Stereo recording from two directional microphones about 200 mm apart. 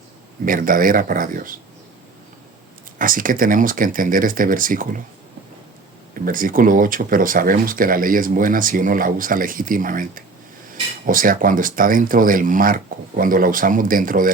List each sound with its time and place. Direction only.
0.4 s speech: 45° right (ahead or behind)
3.0 s speech: 45° right (ahead or behind)
6.1 s speech: 45° right (ahead or behind)